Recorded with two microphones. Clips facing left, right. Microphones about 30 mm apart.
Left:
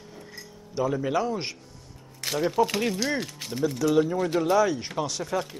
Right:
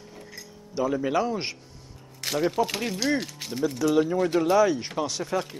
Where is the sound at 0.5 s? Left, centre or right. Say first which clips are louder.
Right 1 dB; centre.